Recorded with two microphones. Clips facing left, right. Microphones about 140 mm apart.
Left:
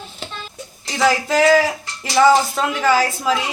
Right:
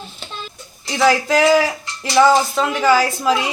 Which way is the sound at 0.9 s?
Centre (ahead or behind).